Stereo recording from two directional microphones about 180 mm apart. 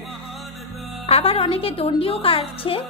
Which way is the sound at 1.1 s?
30° left (ahead or behind).